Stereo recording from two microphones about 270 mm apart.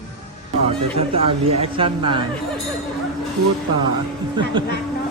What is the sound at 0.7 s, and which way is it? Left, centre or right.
Speech, right.